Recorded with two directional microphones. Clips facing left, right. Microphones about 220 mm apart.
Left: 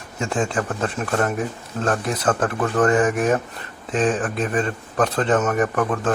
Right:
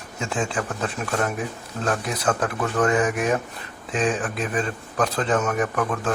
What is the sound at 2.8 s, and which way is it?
Speech, 5° left (ahead or behind).